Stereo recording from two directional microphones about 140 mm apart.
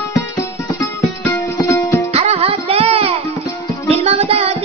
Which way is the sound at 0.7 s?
20° left (ahead or behind).